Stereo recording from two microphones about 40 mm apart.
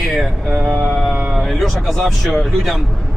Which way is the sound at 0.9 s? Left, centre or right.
Centre.